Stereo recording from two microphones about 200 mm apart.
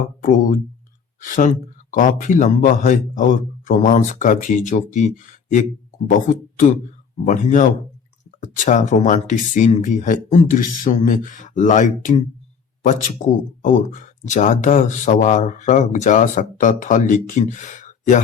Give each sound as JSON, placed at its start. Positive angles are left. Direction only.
{"t": 0.2, "sound": "speech", "side_deg": 45}
{"t": 7.3, "sound": "speech", "side_deg": 40}